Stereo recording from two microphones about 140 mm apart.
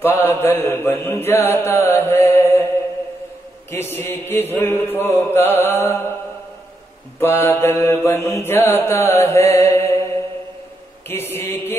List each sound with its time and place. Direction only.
0.0 s mantra: 15° left (ahead or behind)
3.7 s mantra: 15° left (ahead or behind)
7.2 s mantra: 15° left (ahead or behind)
11.1 s mantra: 15° left (ahead or behind)